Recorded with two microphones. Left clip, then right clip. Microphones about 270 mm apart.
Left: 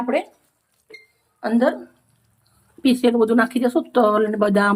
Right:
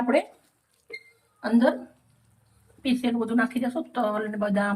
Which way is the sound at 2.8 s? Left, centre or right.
Left.